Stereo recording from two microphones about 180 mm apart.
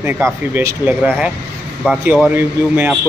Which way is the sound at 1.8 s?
Centre (ahead or behind).